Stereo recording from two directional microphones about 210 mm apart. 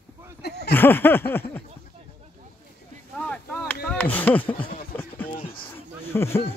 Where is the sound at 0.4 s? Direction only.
50° left (ahead or behind).